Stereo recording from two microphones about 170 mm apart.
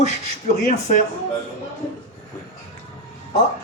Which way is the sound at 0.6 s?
45° left (ahead or behind).